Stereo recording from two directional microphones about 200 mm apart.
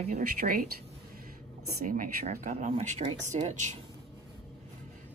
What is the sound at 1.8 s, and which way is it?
Speech, 40° right (ahead or behind).